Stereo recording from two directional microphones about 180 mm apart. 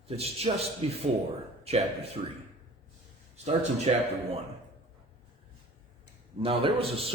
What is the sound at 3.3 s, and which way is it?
A man's voice, 35° right (ahead or behind).